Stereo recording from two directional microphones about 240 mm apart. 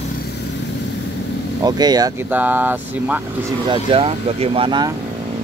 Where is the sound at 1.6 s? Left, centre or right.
Centre.